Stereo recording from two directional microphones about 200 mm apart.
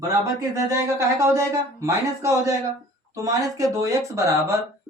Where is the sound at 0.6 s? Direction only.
15° right (ahead or behind).